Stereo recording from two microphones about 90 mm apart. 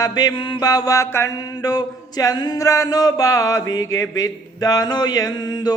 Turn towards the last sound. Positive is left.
turn(degrees=50)  # may be behind; listen again after turning